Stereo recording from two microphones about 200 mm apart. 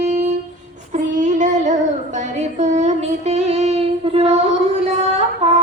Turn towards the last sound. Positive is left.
turn(degrees=-30)  # may be behind; listen again after turning